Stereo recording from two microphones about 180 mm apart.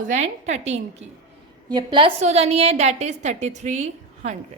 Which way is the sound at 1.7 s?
25° right (ahead or behind).